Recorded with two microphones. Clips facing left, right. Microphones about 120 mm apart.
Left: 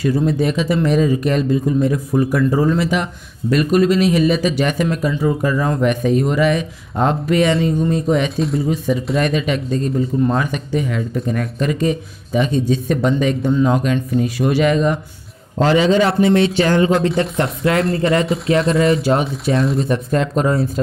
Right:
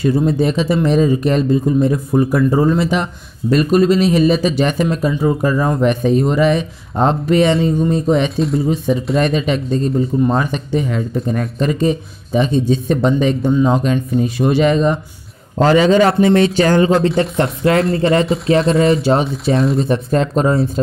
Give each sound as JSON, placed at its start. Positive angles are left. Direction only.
{"t": 0.0, "sound": "a man's voice", "side_deg": -25}
{"t": 8.4, "sound": "speech", "side_deg": 0}
{"t": 8.6, "sound": "a man's voice", "side_deg": -30}
{"t": 15.5, "sound": "a man's voice", "side_deg": -45}